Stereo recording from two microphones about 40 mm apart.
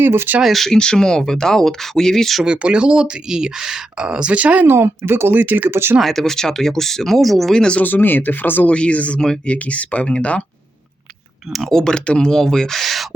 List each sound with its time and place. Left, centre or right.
0.0 s speech: right
0.4 s speech: centre
0.7 s speech: centre
2.4 s speech: right
4.6 s speech: right
5.3 s speech: right
5.7 s speech: right
6.1 s speech: centre
7.5 s speech: left
7.8 s speech: left
8.6 s speech: left
11.7 s speech: centre
12.8 s speech: centre